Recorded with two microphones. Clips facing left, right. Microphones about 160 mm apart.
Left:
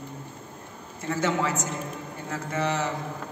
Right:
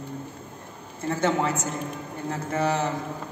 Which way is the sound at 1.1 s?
30° right (ahead or behind).